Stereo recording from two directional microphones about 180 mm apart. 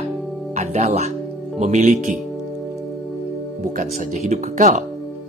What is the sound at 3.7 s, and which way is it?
Speech, 40° right (ahead or behind).